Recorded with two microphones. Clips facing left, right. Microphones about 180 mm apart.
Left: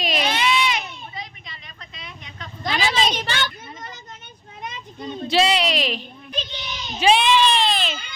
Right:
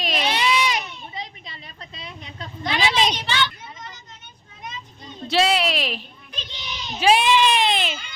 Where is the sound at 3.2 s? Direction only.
50° left (ahead or behind).